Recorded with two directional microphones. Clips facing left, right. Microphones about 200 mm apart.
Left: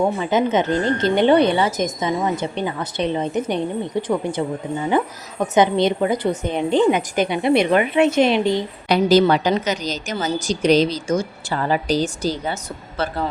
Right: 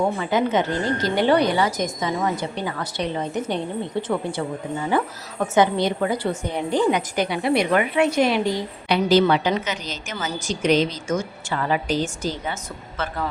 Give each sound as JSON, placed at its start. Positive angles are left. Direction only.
{"t": 0.2, "sound": "a woman's voice", "side_deg": 20}
{"t": 8.9, "sound": "a woman's voice", "side_deg": 40}